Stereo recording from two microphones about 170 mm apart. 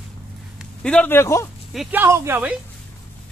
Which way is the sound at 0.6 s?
5° left (ahead or behind).